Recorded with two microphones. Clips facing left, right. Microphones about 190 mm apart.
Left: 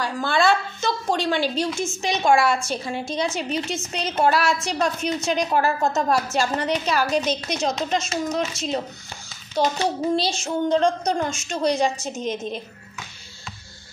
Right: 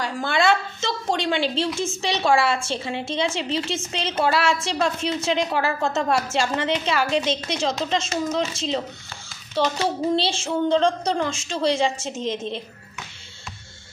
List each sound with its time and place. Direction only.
0.0 s a woman's voice: 20° right (ahead or behind)
10.1 s a woman's voice: 30° right (ahead or behind)